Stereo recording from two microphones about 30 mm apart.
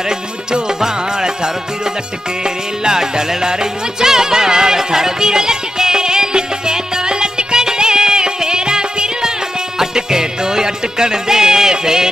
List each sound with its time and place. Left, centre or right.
0.5 s music: centre